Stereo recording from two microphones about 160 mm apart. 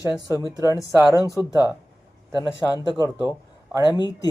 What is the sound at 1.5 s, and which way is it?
Speech, 25° left (ahead or behind).